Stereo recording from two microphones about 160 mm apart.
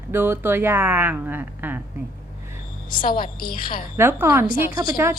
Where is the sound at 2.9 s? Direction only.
60° left (ahead or behind).